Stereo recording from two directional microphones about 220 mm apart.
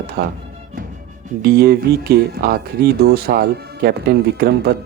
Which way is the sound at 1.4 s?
45° right (ahead or behind).